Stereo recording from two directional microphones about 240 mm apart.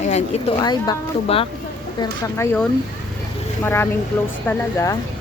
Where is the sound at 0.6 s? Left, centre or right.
Centre.